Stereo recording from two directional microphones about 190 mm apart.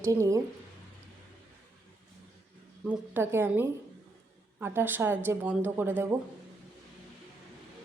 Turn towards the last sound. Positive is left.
turn(degrees=-10)  # may be behind; listen again after turning